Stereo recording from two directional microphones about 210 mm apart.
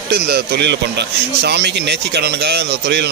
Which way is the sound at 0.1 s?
50° right (ahead or behind).